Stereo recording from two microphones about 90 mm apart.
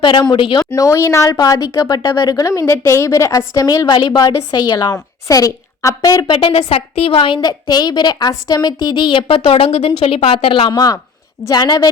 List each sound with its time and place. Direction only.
0.0 s speech: 55° left (ahead or behind)
0.8 s a woman's voice: 35° left (ahead or behind); by 4.2 s 55° left (ahead or behind)
4.2 s a woman's voice: 40° left (ahead or behind)
6.2 s a woman's voice: 70° left (ahead or behind); by 7.3 s 90° left
7.4 s a woman's voice: 50° left (ahead or behind)
9.0 s a woman's voice: 65° left (ahead or behind)
10.8 s a woman's voice: 45° left (ahead or behind)